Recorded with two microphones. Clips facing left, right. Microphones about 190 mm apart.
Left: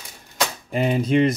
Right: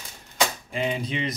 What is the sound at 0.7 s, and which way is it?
Speech, 50° left (ahead or behind).